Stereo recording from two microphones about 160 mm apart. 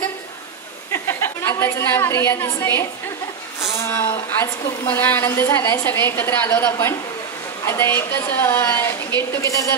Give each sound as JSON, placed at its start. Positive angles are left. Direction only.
{"t": 0.9, "sound": "a woman's voice", "side_deg": 15}